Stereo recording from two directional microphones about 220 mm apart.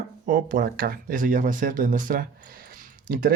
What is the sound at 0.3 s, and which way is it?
Speech, 40° right (ahead or behind).